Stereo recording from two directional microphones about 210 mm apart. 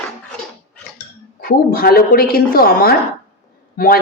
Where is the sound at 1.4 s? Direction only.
45° left (ahead or behind).